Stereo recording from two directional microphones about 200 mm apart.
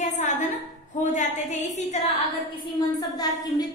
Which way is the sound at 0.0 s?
35° left (ahead or behind).